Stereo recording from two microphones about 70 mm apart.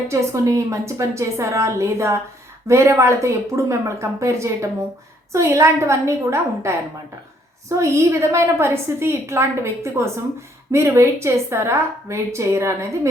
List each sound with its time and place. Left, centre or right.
0.1 s a woman's voice: right